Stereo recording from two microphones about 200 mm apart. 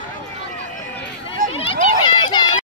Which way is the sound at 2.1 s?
25° left (ahead or behind).